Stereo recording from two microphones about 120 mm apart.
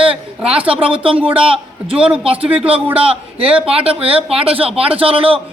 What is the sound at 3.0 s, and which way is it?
Speech, 50° right (ahead or behind).